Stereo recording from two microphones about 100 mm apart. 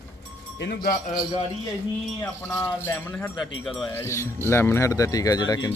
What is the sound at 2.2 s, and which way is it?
Wind chime, 25° left (ahead or behind).